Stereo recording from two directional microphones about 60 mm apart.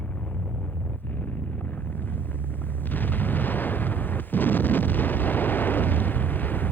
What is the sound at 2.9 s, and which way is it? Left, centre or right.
Artillery fire, left.